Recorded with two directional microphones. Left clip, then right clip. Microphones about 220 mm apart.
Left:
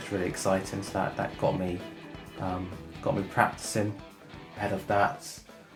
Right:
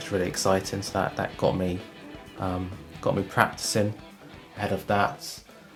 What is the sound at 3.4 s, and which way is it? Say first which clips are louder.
Speech: right 2 dB; 45° right (ahead or behind).